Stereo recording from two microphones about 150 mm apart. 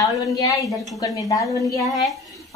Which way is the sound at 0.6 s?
25° left (ahead or behind).